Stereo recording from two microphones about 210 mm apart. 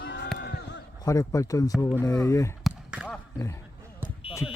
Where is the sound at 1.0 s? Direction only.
15° left (ahead or behind).